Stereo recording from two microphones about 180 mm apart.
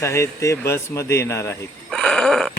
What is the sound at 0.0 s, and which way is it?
Speech, 15° left (ahead or behind).